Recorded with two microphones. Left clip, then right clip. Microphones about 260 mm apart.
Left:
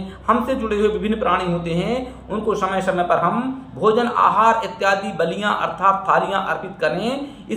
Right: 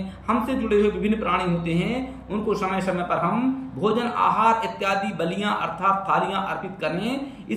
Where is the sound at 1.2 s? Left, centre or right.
Centre.